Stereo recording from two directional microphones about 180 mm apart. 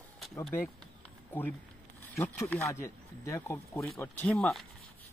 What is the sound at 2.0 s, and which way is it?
Speech, 10° left (ahead or behind).